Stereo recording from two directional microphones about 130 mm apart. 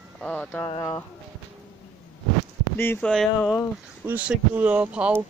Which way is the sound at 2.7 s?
15° left (ahead or behind).